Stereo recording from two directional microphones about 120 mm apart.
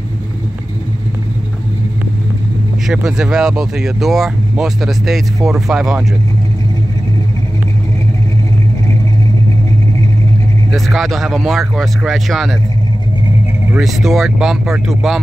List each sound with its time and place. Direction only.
2.9 s speech: 5° right (ahead or behind)
10.7 s speech: centre (ahead or behind)
13.7 s speech: 5° right (ahead or behind)